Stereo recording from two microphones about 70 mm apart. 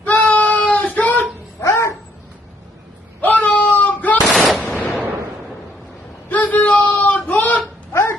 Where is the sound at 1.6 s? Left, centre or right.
Left.